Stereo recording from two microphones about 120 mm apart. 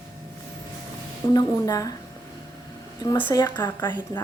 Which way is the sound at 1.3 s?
30° left (ahead or behind).